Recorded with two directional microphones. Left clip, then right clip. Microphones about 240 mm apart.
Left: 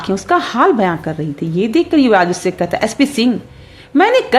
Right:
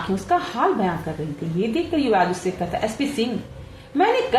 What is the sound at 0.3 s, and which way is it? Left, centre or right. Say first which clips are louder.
A woman's voice: left 8 dB; left.